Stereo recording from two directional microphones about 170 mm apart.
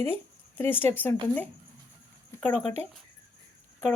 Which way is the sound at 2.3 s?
15° left (ahead or behind).